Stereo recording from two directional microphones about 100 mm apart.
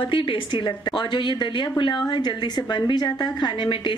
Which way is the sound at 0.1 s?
55° left (ahead or behind).